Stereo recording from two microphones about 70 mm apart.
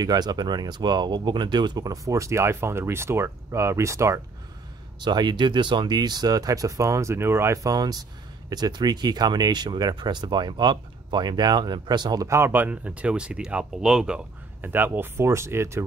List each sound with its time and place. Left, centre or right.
0.0 s speech: right
5.0 s speech: right
7.5 s speech: right
12.3 s speech: right
12.5 s speech: right
14.6 s speech: right